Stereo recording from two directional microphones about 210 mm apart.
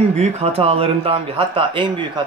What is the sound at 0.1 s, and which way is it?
Speech, 30° right (ahead or behind).